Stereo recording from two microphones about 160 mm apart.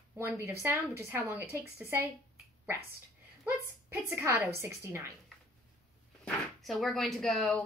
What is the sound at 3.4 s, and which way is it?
A woman's voice, 15° right (ahead or behind).